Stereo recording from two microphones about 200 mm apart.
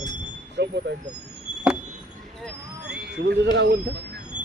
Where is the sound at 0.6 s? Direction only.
55° right (ahead or behind).